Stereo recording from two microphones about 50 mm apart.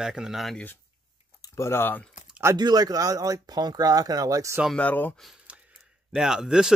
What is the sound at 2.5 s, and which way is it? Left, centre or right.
Speech, right.